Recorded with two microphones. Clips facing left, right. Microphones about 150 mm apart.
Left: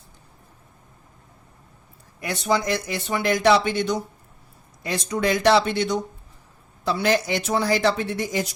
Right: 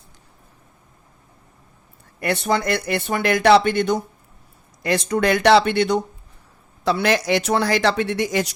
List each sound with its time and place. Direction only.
2.2 s speech: 60° right (ahead or behind)
4.8 s speech: 75° right (ahead or behind)
6.8 s speech: 75° right (ahead or behind)